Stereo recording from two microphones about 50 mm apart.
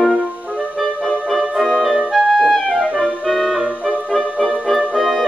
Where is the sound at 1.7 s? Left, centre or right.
Centre.